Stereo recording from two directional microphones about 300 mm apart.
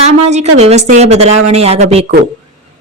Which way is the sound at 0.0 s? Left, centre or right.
Right.